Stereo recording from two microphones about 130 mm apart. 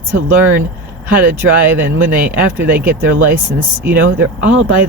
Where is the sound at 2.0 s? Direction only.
90° right.